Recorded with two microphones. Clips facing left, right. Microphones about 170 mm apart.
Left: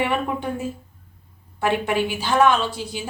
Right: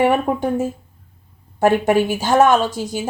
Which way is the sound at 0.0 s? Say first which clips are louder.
Right 7 dB; 45° right (ahead or behind).